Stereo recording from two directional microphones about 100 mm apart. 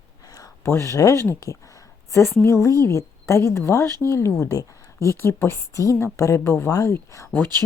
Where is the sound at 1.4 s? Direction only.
30° left (ahead or behind).